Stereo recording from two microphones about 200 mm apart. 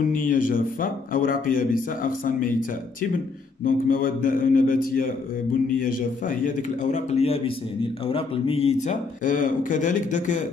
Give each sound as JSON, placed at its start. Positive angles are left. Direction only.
{"t": 0.0, "sound": "a man's voice", "side_deg": 40}
{"t": 3.6, "sound": "a man's voice", "side_deg": 45}